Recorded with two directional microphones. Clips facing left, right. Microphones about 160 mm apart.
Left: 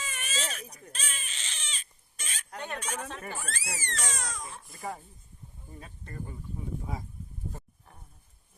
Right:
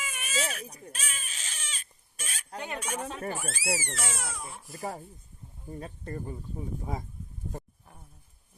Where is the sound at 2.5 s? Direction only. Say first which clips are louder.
Right 2 dB; 10° right (ahead or behind).